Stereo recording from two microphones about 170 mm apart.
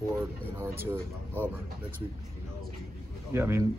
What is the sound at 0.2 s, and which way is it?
A man's voice, 15° right (ahead or behind).